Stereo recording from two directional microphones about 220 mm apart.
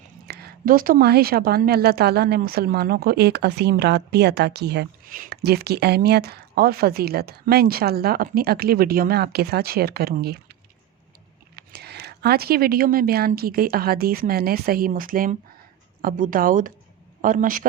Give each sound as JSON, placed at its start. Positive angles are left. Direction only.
{"t": 0.3, "sound": "a woman's voice", "side_deg": -45}